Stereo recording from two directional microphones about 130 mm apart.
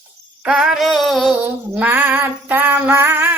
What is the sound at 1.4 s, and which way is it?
Female singing, 15° right (ahead or behind).